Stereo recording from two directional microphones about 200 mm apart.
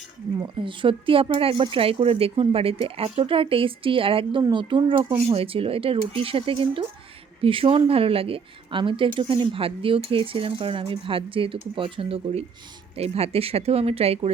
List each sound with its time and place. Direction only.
0.3 s a woman's voice: 25° right (ahead or behind)